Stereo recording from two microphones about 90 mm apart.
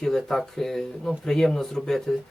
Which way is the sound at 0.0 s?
5° left (ahead or behind).